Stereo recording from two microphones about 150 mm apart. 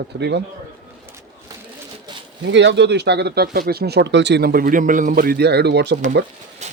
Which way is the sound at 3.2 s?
90° right.